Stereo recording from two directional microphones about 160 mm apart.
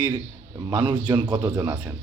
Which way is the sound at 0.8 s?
30° right (ahead or behind).